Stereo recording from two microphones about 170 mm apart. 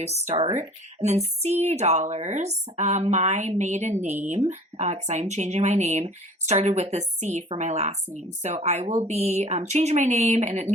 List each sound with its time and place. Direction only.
0.9 s speech: 40° right (ahead or behind)